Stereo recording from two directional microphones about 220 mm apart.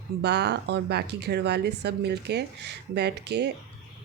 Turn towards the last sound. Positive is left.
turn(degrees=-50)  # may be behind; listen again after turning